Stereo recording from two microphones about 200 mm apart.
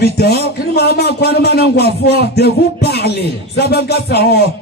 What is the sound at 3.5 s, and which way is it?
Music, 55° left (ahead or behind).